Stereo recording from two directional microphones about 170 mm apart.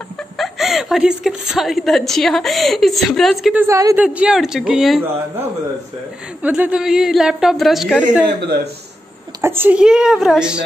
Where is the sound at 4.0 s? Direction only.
5° right (ahead or behind).